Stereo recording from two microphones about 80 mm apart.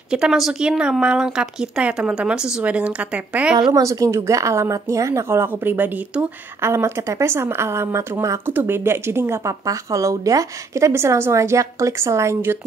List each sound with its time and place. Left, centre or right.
0.1 s speech: centre
3.7 s speech: right
6.6 s speech: right
8.5 s speech: right